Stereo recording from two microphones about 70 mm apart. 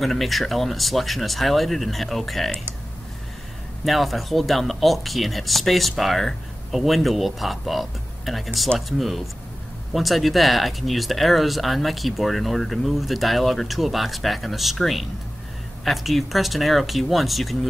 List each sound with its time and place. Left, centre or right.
0.0 s speech: centre
3.8 s speech: centre